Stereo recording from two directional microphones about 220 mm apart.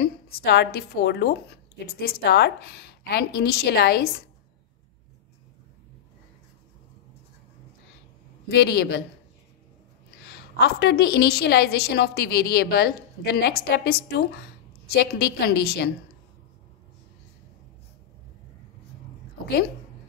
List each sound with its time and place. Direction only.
0.0 s a woman's voice: 45° left (ahead or behind)
8.5 s a woman's voice: 50° left (ahead or behind)
10.2 s a woman's voice: 50° left (ahead or behind)